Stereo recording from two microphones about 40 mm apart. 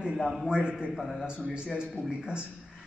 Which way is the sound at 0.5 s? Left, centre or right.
Right.